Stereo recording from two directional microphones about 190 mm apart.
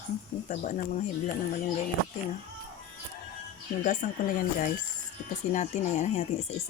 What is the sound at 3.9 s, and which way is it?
Speech, 45° left (ahead or behind).